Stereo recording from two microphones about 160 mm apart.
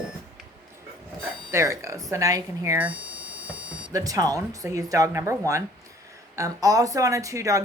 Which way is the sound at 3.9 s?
20° right (ahead or behind).